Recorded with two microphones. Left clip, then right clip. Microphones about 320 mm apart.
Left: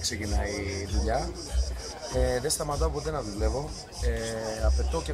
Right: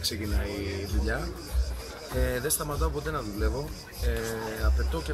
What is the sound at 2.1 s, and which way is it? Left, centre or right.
Speech, centre.